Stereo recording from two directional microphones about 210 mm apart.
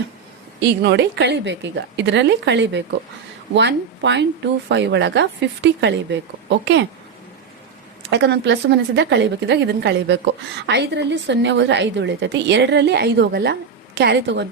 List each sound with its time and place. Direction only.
0.6 s a woman's voice: 55° right (ahead or behind)
8.1 s a woman's voice: 55° right (ahead or behind)